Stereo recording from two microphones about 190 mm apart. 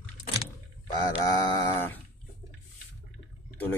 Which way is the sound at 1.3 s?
15° left (ahead or behind).